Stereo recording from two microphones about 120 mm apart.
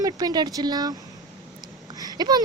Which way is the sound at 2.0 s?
35° right (ahead or behind).